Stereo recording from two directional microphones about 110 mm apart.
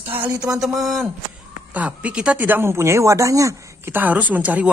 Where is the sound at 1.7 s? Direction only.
15° right (ahead or behind).